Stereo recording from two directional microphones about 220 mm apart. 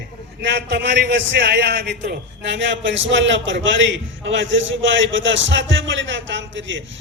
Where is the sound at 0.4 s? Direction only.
55° right (ahead or behind).